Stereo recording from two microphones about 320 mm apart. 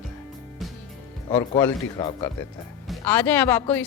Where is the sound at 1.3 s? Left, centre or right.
Centre.